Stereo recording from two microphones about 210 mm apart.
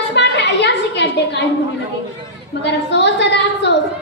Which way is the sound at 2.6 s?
55° left (ahead or behind).